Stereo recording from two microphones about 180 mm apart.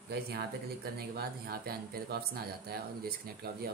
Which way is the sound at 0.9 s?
60° right (ahead or behind).